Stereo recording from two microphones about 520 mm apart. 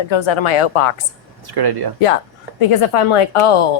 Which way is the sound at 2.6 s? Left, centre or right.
Left.